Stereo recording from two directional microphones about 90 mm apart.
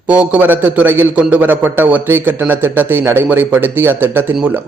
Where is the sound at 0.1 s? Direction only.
15° right (ahead or behind).